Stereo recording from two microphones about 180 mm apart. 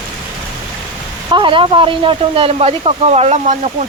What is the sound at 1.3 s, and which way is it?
Speech, 25° right (ahead or behind).